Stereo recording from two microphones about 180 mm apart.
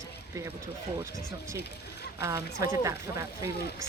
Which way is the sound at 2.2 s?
15° right (ahead or behind).